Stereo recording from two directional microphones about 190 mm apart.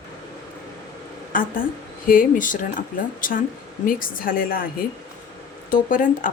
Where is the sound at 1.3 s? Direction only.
45° left (ahead or behind).